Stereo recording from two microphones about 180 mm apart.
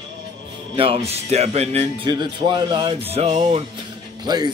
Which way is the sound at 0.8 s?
35° right (ahead or behind).